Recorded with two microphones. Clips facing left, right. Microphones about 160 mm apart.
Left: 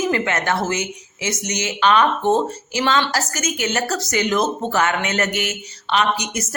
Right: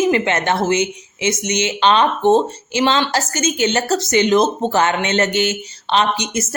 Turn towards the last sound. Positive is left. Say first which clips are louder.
# right 2 dB
turn(degrees=-25)  # may be behind; listen again after turning